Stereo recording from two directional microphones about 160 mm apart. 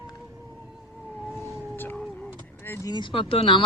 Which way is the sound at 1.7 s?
10° left (ahead or behind).